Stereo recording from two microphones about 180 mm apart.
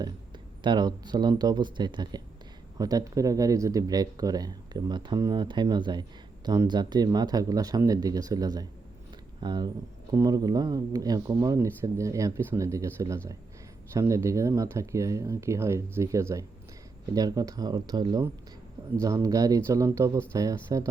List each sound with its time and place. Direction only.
0.6 s speech: 25° right (ahead or behind)